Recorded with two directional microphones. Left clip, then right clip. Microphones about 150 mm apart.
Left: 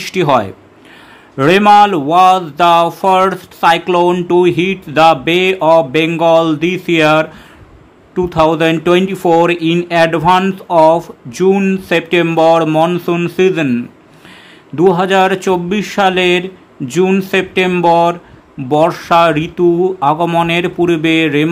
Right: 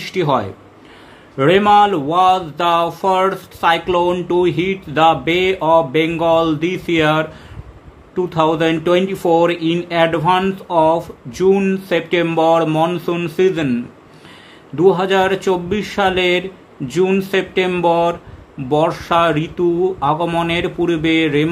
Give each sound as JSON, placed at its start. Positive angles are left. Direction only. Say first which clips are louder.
{"t": 0.0, "sound": "a man's voice", "louder": "left 5 dB", "side_deg": 35}